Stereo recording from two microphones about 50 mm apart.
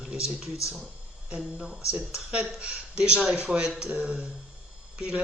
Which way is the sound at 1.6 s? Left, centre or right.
Centre.